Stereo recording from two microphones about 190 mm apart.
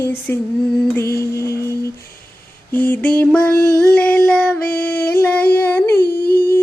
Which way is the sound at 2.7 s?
10° left (ahead or behind).